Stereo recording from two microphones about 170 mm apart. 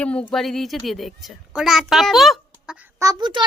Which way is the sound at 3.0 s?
20° right (ahead or behind).